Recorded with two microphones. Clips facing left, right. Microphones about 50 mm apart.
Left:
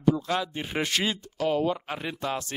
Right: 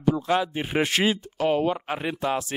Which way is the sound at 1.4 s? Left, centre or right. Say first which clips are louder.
Right 1 dB; right.